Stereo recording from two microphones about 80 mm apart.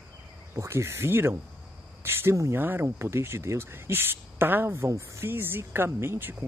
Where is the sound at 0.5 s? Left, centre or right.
Right.